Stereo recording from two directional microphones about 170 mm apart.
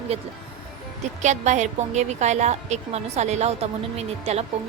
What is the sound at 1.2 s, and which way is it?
A woman's voice, 45° right (ahead or behind).